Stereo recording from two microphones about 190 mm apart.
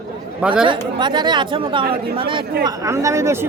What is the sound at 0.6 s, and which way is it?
Speech, 25° right (ahead or behind).